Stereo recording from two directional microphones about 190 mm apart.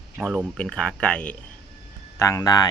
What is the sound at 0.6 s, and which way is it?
Speech, 5° left (ahead or behind).